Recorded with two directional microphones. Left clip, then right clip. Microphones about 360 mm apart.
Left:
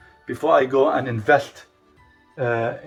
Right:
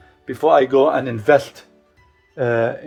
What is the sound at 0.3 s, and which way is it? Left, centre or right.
Speech, centre.